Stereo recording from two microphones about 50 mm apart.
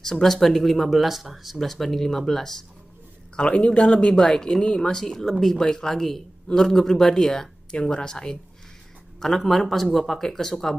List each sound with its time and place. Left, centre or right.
0.0 s speech: centre
3.3 s a man's voice: left